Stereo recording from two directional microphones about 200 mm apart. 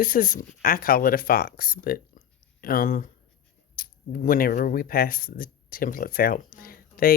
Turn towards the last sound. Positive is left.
turn(degrees=45)  # may be behind; listen again after turning